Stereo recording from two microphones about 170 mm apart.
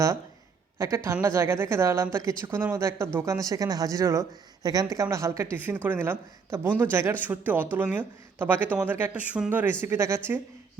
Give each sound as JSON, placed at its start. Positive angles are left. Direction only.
{"t": 0.8, "sound": "speech", "side_deg": -20}